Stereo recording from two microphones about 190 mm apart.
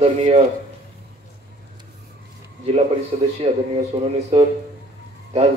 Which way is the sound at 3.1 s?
35° right (ahead or behind).